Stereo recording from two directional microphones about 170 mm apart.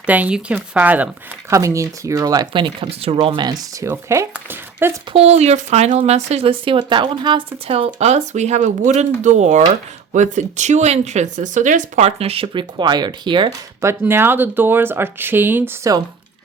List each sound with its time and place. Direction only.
0.0 s speech: 10° right (ahead or behind)
5.1 s speech: 40° right (ahead or behind)
13.8 s speech: 15° right (ahead or behind)